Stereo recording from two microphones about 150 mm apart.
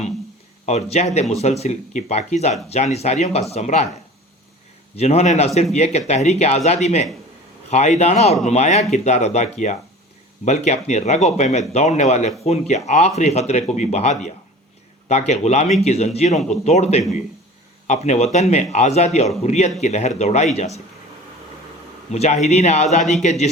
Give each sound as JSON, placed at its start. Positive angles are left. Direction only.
{"t": 0.6, "sound": "speech", "side_deg": 50}
{"t": 4.9, "sound": "speech", "side_deg": 45}
{"t": 22.1, "sound": "speech", "side_deg": 45}